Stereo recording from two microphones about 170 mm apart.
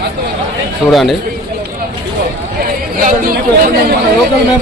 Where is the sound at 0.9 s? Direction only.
Centre (ahead or behind).